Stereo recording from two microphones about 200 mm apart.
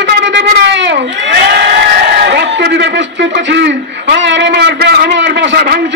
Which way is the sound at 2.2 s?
60° right (ahead or behind).